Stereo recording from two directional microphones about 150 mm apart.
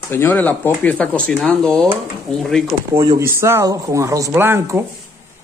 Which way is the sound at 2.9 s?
20° right (ahead or behind).